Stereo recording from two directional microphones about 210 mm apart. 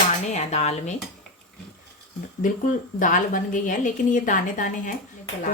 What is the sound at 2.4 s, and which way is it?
Speech, 40° left (ahead or behind).